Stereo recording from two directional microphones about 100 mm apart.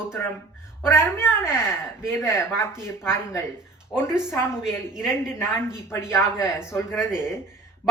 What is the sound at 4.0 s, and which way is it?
Speech, 25° left (ahead or behind).